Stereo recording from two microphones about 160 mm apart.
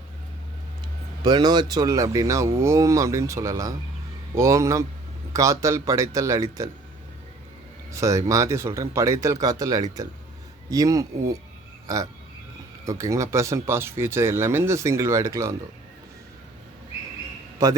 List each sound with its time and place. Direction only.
1.2 s speech: 25° right (ahead or behind)
7.9 s speech: 20° right (ahead or behind)
12.8 s speech: 20° right (ahead or behind)